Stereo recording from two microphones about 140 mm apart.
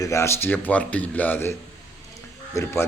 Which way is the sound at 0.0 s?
20° left (ahead or behind).